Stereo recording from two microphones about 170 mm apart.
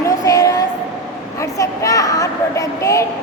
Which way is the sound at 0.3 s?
20° left (ahead or behind).